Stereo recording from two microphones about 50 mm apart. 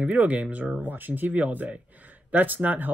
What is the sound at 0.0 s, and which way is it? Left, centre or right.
Speech, right.